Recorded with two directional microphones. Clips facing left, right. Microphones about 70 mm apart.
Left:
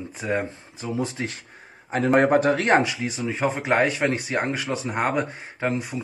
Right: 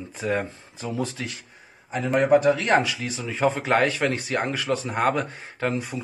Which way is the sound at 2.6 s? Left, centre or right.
Left.